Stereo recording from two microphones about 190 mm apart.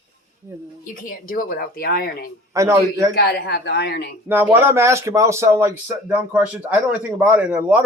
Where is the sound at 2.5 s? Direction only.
15° right (ahead or behind).